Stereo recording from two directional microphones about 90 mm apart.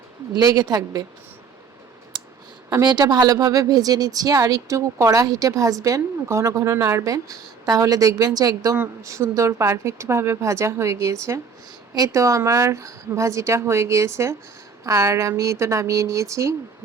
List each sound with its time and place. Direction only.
0.3 s a woman's voice: 50° right (ahead or behind)
2.8 s speech: 50° right (ahead or behind); by 16.6 s 35° right (ahead or behind)